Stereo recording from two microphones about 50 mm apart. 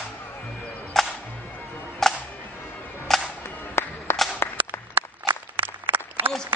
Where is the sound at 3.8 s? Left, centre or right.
Left.